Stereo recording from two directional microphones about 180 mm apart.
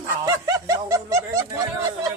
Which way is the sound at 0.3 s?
20° right (ahead or behind).